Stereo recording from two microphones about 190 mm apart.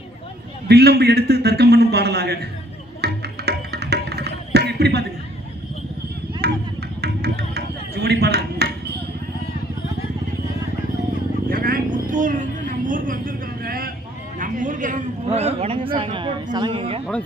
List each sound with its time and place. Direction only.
0.7 s a man's voice: 60° right (ahead or behind)
3.0 s music: 60° right (ahead or behind)
6.4 s a sound: 60° right (ahead or behind)
11.4 s vehicle: 50° right (ahead or behind)
14.3 s a man's voice: 45° right (ahead or behind); by 17.0 s 30° right (ahead or behind)